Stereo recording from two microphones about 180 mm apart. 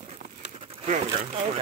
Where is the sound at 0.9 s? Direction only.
35° right (ahead or behind).